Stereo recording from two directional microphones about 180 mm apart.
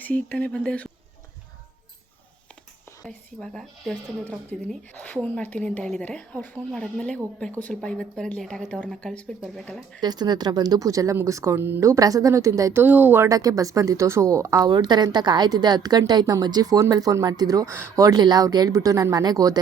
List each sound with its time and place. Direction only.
0.0 s a woman's voice: 10° left (ahead or behind)
3.1 s a woman's voice: 5° left (ahead or behind)
10.0 s a woman's voice: 25° right (ahead or behind)